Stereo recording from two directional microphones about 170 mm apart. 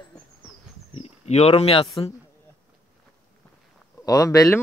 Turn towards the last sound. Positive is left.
turn(degrees=20)  # may be behind; listen again after turning